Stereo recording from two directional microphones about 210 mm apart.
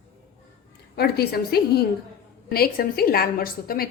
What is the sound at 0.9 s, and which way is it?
A woman's voice, 50° left (ahead or behind).